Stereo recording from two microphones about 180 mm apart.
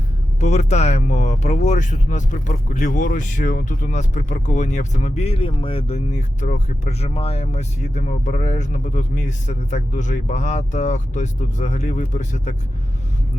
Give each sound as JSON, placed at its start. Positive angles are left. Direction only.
{"t": 0.3, "sound": "speech", "side_deg": 40}